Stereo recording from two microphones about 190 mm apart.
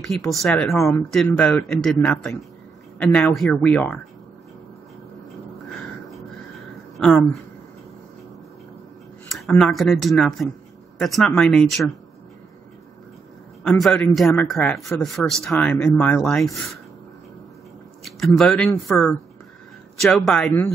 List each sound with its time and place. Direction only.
0.3 s a man's voice: 5° left (ahead or behind)
7.0 s speech: 5° left (ahead or behind)
9.3 s a man's voice: centre (ahead or behind)
13.7 s a man's voice: 5° left (ahead or behind)
18.0 s a man's voice: centre (ahead or behind)